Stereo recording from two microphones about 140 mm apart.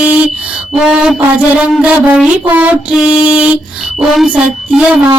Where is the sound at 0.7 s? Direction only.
5° right (ahead or behind).